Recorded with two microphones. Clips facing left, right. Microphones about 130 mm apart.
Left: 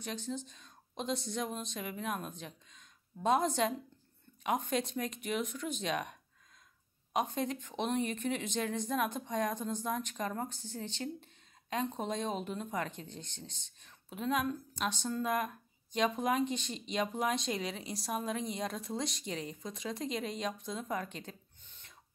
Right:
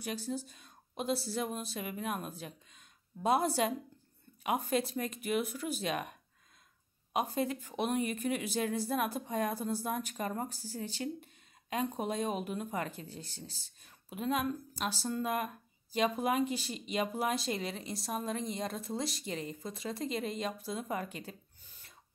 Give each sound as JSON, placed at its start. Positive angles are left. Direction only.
{"t": 0.0, "sound": "speech", "side_deg": -10}